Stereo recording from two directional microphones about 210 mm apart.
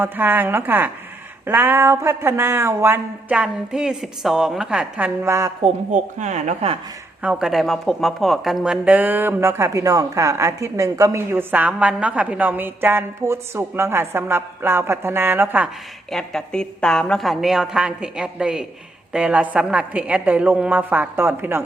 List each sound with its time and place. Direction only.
0.0 s speech: 10° right (ahead or behind)
5.9 s speech: 35° right (ahead or behind)
7.2 s speech: 5° right (ahead or behind)
16.1 s a woman's voice: 5° left (ahead or behind)